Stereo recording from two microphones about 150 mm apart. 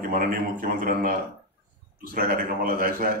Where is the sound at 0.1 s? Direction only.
65° right (ahead or behind).